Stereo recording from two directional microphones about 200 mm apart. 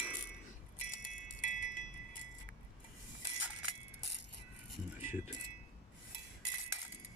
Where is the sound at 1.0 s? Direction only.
40° left (ahead or behind).